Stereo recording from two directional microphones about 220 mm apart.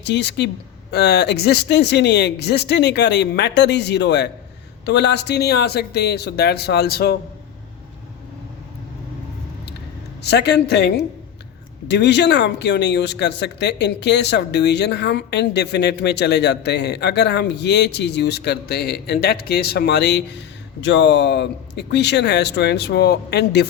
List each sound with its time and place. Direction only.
0.0 s speech: 50° left (ahead or behind)
10.2 s speech: 50° left (ahead or behind)